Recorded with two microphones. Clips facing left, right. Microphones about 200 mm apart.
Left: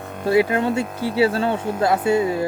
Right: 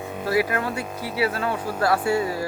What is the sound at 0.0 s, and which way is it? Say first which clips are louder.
Music: right 1 dB; 5° right (ahead or behind).